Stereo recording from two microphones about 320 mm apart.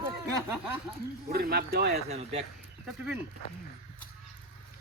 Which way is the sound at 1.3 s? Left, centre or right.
Right.